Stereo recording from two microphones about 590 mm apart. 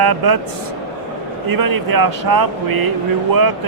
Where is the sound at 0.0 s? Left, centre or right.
Right.